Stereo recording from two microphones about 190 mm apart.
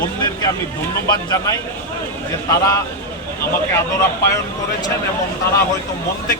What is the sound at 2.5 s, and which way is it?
Speech, 15° left (ahead or behind).